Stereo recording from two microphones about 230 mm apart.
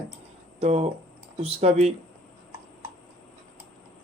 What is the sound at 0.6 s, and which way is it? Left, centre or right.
Speech, right.